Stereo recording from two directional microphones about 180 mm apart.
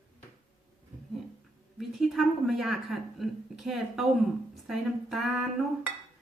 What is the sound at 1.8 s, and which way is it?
Speech, centre (ahead or behind).